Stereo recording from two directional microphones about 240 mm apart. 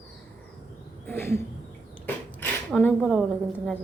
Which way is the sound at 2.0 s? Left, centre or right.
Centre.